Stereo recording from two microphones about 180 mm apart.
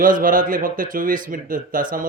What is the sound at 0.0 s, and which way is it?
A man's voice, 50° right (ahead or behind).